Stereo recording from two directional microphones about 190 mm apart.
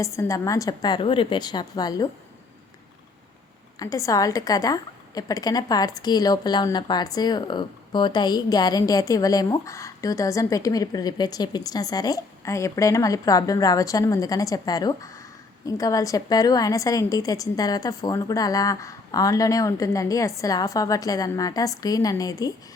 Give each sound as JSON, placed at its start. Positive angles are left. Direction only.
{"t": 0.0, "sound": "a woman's voice", "side_deg": 15}
{"t": 3.8, "sound": "a woman's voice", "side_deg": 20}